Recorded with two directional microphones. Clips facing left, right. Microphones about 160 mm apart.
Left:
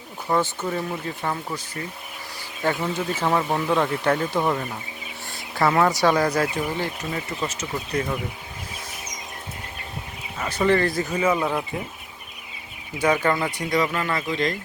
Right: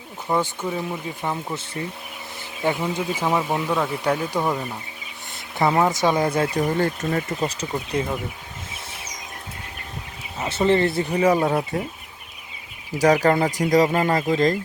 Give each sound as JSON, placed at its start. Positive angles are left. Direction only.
{"t": 0.3, "sound": "speech", "side_deg": -10}
{"t": 2.8, "sound": "speech", "side_deg": -10}
{"t": 6.5, "sound": "speech", "side_deg": -45}
{"t": 10.4, "sound": "speech", "side_deg": -20}
{"t": 13.0, "sound": "speech", "side_deg": -40}